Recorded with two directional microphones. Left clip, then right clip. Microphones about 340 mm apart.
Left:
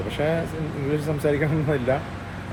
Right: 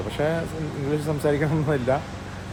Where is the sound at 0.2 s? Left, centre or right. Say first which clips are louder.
Left 1 dB; centre.